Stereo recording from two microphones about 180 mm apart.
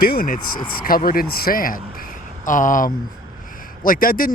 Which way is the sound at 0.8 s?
55° left (ahead or behind).